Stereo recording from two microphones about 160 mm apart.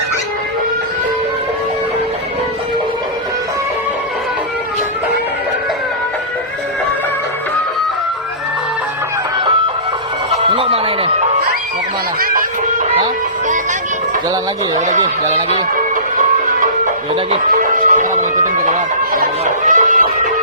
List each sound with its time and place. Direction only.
10.5 s music: 35° right (ahead or behind)
12.2 s music: 60° right (ahead or behind)
14.8 s a sound: 50° right (ahead or behind)
16.1 s music: 55° right (ahead or behind)